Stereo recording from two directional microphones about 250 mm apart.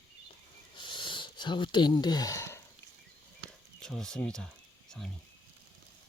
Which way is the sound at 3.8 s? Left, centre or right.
Centre.